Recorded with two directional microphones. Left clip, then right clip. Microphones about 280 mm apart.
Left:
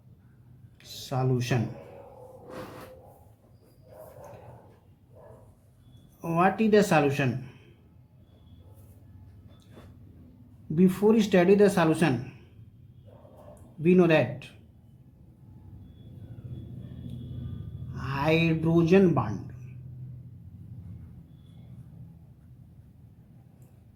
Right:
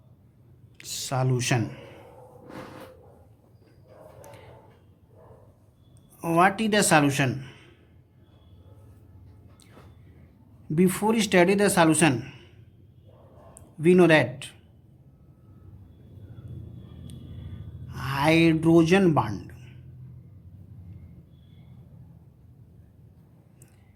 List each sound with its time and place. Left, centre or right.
0.8 s speech: right
6.2 s a man's voice: right
10.8 s a man's voice: right
13.8 s a man's voice: right
17.9 s speech: right